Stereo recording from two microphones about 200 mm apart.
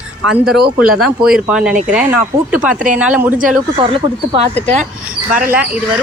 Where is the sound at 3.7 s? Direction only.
30° right (ahead or behind).